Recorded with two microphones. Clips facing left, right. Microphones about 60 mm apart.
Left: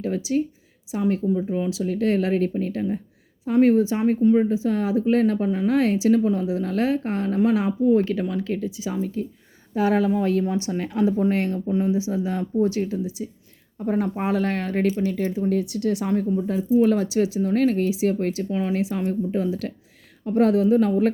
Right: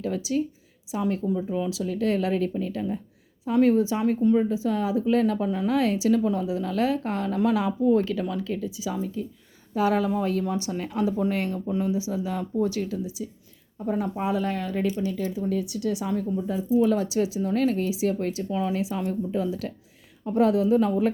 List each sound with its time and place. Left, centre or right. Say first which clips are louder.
0.0 s speech: left 3 dB; left
1.5 s speech: left 3 dB; left